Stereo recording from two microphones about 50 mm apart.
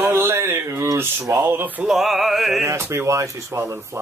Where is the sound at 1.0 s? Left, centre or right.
Right.